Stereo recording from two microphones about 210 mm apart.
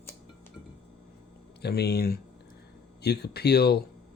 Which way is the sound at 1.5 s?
50° left (ahead or behind).